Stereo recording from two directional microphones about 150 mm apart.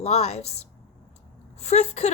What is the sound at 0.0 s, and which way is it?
Speech, 45° left (ahead or behind).